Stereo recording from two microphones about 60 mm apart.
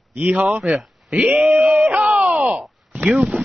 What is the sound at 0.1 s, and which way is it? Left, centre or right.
Speech, right.